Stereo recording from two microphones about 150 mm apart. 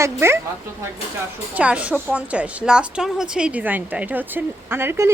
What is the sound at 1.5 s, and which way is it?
Speech, 10° right (ahead or behind).